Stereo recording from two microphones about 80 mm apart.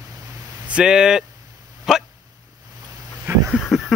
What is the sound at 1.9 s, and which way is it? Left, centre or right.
Dog, centre.